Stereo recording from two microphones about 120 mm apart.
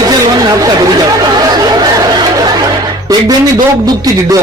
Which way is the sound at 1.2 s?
35° right (ahead or behind).